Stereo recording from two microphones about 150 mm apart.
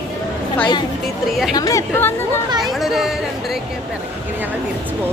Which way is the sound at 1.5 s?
20° left (ahead or behind).